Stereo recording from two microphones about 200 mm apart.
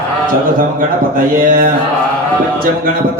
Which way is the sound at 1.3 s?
45° right (ahead or behind).